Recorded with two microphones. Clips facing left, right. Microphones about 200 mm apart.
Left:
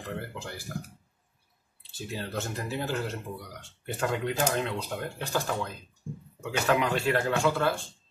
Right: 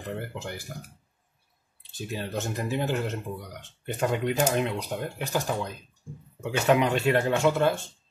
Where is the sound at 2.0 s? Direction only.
15° right (ahead or behind).